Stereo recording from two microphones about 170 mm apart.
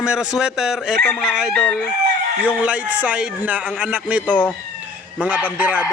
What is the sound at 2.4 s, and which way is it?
A man's voice, 10° right (ahead or behind).